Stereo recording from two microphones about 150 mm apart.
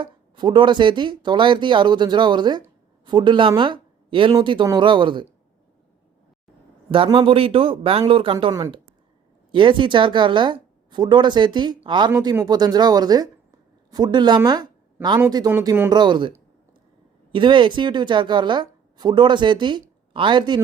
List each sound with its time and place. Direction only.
0.0 s a woman's voice: 30° right (ahead or behind)
6.9 s a woman's voice: 35° right (ahead or behind)
12.1 s speech: 20° right (ahead or behind)
15.5 s speech: 15° right (ahead or behind)
15.9 s speech: 30° right (ahead or behind)
17.3 s a woman's voice: 35° right (ahead or behind)